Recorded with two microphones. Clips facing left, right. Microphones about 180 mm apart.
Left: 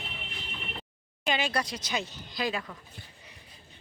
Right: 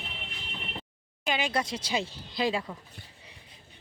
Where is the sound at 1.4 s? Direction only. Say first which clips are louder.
Right 1 dB; 20° right (ahead or behind).